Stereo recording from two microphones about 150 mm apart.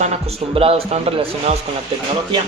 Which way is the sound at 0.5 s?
40° right (ahead or behind).